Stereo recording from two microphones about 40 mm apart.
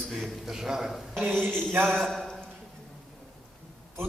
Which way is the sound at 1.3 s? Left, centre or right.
Centre.